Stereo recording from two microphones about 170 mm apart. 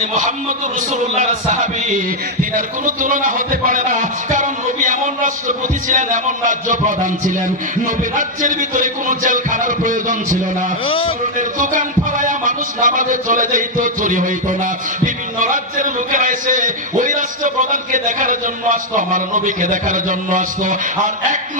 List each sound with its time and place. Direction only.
0.0 s music: 45° right (ahead or behind)
10.8 s a man's voice: 30° left (ahead or behind)
11.3 s music: 50° right (ahead or behind)